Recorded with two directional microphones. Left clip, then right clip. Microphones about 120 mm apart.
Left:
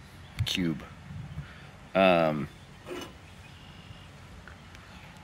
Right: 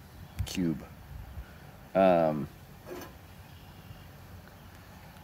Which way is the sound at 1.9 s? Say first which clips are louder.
Left 1 dB; 5° right (ahead or behind).